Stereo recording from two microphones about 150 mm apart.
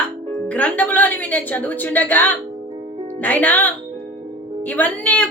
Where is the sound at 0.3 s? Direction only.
10° left (ahead or behind).